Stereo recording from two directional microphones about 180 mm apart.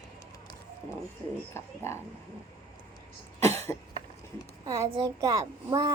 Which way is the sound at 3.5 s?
15° left (ahead or behind).